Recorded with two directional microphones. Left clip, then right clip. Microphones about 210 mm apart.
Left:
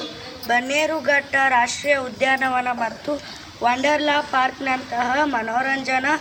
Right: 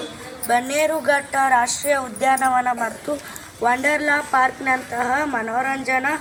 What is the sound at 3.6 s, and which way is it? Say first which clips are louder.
A woman's voice: even; 45° left (ahead or behind).